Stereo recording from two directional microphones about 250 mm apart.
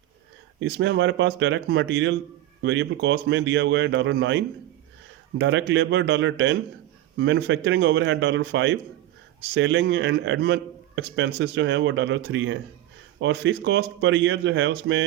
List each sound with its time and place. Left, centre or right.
0.6 s a man's voice: right